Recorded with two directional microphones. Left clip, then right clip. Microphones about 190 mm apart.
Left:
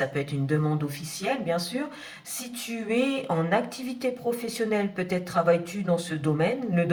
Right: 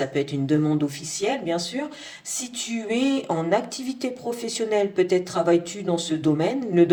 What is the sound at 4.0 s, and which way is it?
Speech, 25° right (ahead or behind).